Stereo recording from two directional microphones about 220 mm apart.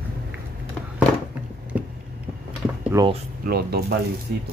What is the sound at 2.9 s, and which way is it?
Speech, 15° right (ahead or behind).